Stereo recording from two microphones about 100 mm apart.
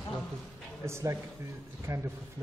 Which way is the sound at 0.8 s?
25° right (ahead or behind).